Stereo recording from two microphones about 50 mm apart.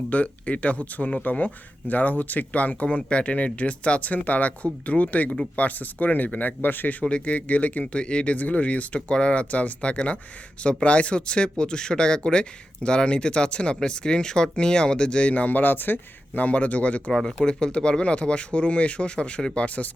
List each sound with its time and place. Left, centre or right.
0.1 s speech: left
7.3 s speech: left
9.0 s speech: left
16.4 s speech: left
17.1 s speech: centre
19.6 s speech: left